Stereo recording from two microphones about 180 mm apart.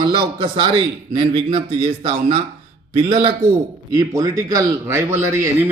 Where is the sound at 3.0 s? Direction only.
30° right (ahead or behind).